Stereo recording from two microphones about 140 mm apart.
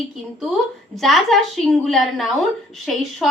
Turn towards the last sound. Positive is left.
turn(degrees=0)  # may be behind; listen again after turning